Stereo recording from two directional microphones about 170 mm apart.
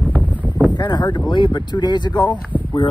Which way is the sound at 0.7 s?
25° left (ahead or behind).